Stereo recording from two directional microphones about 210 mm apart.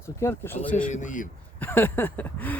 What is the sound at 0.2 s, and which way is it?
Speech, 10° left (ahead or behind).